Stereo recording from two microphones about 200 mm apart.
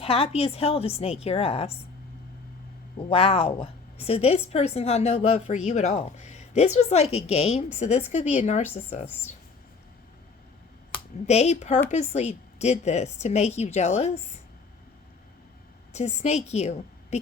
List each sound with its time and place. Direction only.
0.0 s a woman's voice: 30° left (ahead or behind)
3.0 s a woman's voice: 30° left (ahead or behind)
10.9 s a woman's voice: 30° left (ahead or behind)
15.9 s a woman's voice: 35° left (ahead or behind)